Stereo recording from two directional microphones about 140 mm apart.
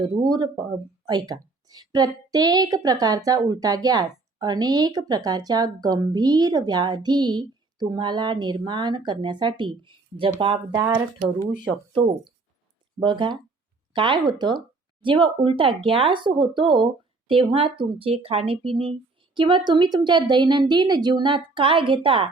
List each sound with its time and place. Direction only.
0.0 s a woman's voice: 30° right (ahead or behind)
11.9 s speech: 35° right (ahead or behind)